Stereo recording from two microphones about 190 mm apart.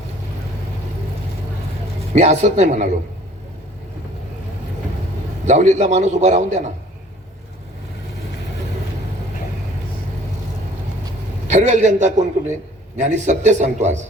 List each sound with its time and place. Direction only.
2.1 s a man's voice: 35° right (ahead or behind)
5.5 s a man's voice: 40° right (ahead or behind)
11.4 s a man's voice: 40° right (ahead or behind)